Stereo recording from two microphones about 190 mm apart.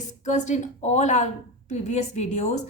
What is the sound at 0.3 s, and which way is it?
A woman's voice, 40° left (ahead or behind).